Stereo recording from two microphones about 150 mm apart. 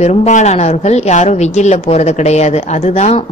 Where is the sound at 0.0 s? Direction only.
50° left (ahead or behind).